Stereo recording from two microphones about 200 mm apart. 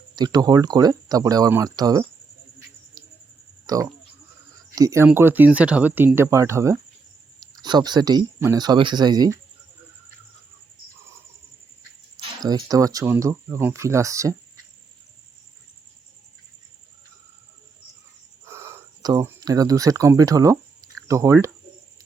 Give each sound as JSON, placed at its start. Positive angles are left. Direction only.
{"t": 0.2, "sound": "speech", "side_deg": -20}
{"t": 3.0, "sound": "a sound", "side_deg": -20}
{"t": 3.7, "sound": "speech", "side_deg": -15}
{"t": 12.1, "sound": "speech", "side_deg": -20}
{"t": 18.4, "sound": "a sound", "side_deg": -10}
{"t": 21.1, "sound": "speech", "side_deg": -15}